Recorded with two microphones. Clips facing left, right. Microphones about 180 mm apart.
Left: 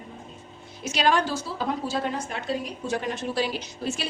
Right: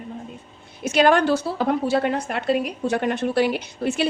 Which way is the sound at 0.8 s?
55° right (ahead or behind).